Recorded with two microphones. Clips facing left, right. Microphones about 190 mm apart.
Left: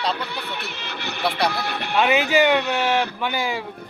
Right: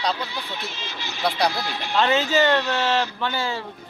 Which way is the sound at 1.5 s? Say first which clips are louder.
Left 2 dB; 60° left (ahead or behind).